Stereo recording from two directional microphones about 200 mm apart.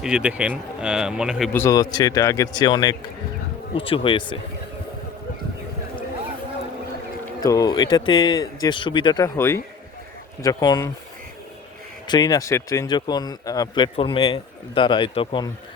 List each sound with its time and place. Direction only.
0.0 s speech: 5° right (ahead or behind)
1.5 s speech: 15° left (ahead or behind)
7.4 s speech: 20° left (ahead or behind)
12.0 s speech: 20° left (ahead or behind)